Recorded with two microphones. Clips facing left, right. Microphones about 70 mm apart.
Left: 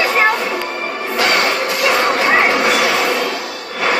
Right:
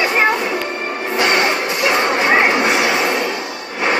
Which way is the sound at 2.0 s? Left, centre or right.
Centre.